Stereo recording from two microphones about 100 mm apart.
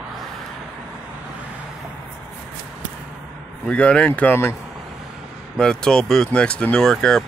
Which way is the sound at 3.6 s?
10° left (ahead or behind).